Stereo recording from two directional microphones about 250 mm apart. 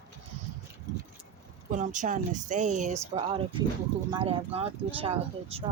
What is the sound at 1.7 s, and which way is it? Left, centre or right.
Speech, right.